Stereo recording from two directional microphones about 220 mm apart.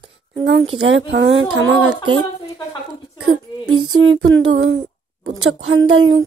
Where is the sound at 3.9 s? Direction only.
65° right (ahead or behind).